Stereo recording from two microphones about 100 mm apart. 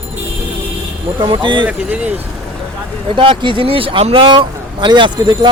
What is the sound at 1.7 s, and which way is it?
Speech, 10° right (ahead or behind).